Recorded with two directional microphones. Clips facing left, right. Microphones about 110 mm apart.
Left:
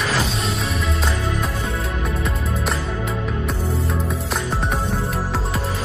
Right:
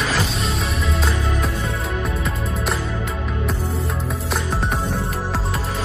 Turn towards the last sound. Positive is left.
turn(degrees=0)  # may be behind; listen again after turning